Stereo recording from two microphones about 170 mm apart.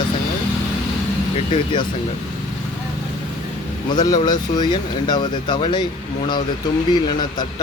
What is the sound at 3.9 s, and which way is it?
Speech, 25° left (ahead or behind).